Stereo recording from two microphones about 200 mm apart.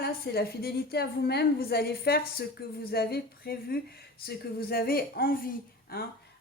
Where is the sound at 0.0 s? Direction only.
50° left (ahead or behind).